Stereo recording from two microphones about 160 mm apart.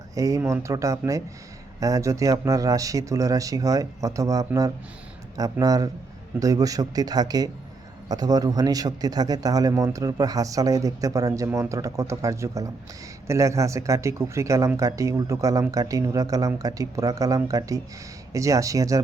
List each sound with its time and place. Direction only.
0.1 s speech: 20° right (ahead or behind)